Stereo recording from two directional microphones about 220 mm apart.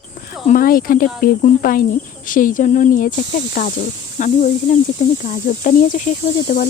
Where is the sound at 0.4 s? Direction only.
40° left (ahead or behind).